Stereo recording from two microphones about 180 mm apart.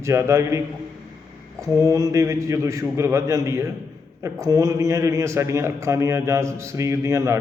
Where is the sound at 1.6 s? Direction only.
15° right (ahead or behind).